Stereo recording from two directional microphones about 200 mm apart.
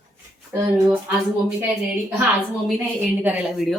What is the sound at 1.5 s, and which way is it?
A woman's voice, 10° right (ahead or behind).